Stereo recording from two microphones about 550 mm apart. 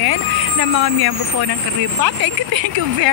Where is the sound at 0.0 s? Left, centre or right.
Right.